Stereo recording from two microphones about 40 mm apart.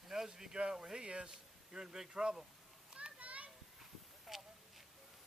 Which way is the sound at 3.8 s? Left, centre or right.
Centre.